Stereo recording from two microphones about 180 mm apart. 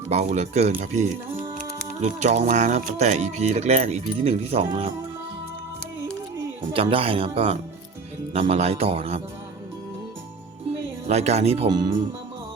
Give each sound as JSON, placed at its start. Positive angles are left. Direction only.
{"t": 0.1, "sound": "speech", "side_deg": -40}
{"t": 6.7, "sound": "speech", "side_deg": -30}
{"t": 11.1, "sound": "speech", "side_deg": -35}
{"t": 11.7, "sound": "speech", "side_deg": -25}